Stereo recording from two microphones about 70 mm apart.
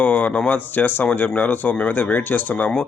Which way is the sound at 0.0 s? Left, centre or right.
Left.